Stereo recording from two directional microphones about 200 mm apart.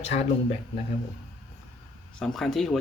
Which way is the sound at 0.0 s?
35° left (ahead or behind).